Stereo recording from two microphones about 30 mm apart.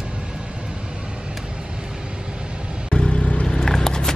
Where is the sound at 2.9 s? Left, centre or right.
Left.